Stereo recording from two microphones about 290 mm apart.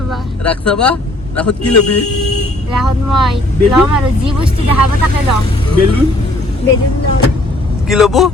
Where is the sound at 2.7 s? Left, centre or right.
Centre.